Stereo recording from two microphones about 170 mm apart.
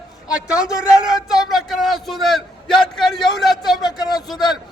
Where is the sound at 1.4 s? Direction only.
Centre (ahead or behind).